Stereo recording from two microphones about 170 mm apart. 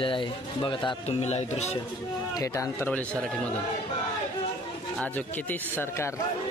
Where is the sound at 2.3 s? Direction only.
20° left (ahead or behind).